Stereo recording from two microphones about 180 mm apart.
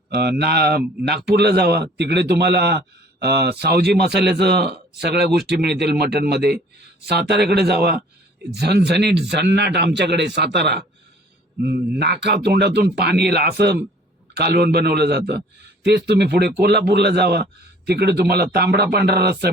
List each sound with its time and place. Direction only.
0.1 s a man's voice: 65° right (ahead or behind)
11.9 s a man's voice: 65° right (ahead or behind)